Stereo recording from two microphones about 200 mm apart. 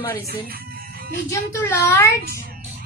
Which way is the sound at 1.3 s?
15° left (ahead or behind).